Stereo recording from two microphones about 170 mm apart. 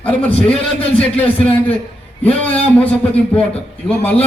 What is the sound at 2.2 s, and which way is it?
Speech, 35° left (ahead or behind).